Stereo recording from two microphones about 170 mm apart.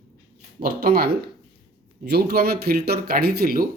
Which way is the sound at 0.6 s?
60° right (ahead or behind).